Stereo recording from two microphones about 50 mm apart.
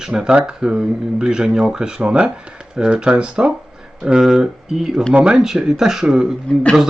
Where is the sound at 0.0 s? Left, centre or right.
Centre.